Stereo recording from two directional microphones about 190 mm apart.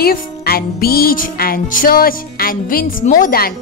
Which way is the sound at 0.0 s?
55° left (ahead or behind).